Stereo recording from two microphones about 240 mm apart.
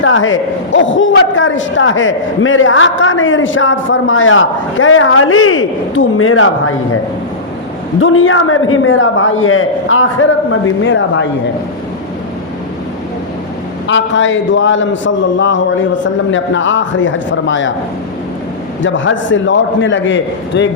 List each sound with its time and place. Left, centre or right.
0.0 s a man's voice: left
8.0 s a man's voice: left
13.8 s a man's voice: left
18.8 s a man's voice: left